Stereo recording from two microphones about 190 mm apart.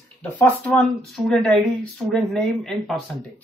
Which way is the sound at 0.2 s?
5° left (ahead or behind).